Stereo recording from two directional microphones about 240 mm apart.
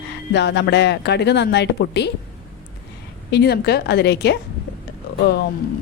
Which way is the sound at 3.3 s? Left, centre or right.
Left.